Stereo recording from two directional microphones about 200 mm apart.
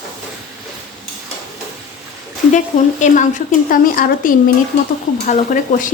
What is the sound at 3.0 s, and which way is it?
A woman's voice, 40° left (ahead or behind).